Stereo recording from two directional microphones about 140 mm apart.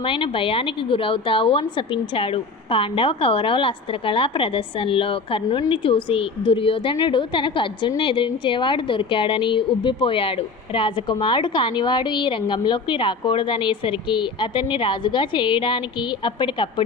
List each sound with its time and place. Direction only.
0.0 s a woman's voice: 40° left (ahead or behind)